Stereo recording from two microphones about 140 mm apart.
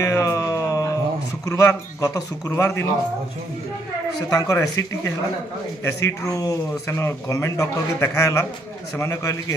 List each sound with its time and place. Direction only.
0.0 s a sound: 20° left (ahead or behind)
1.4 s speech: 20° left (ahead or behind)
4.3 s speech: 25° left (ahead or behind)